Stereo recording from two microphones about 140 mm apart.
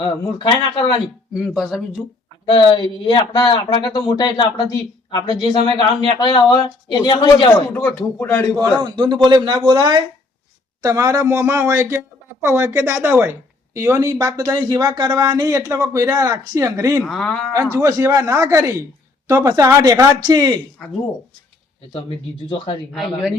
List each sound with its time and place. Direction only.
0.0 s speech: 35° left (ahead or behind)
1.3 s speech: 5° right (ahead or behind)
2.5 s speech: 35° left (ahead or behind)
7.7 s speech: 10° left (ahead or behind)
8.5 s a man's voice: 30° right (ahead or behind)
17.0 s speech: 5° left (ahead or behind)
17.5 s speech: 25° right (ahead or behind)
20.8 s speech: 5° left (ahead or behind)
22.4 s speech: 35° left (ahead or behind)
22.9 s speech: centre (ahead or behind)